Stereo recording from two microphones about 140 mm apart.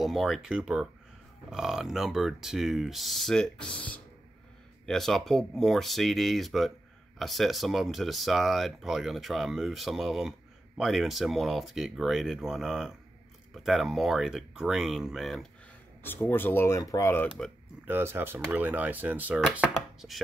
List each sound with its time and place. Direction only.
0.0 s speech: centre (ahead or behind)
16.0 s speech: 15° left (ahead or behind)
17.8 s speech: 15° right (ahead or behind)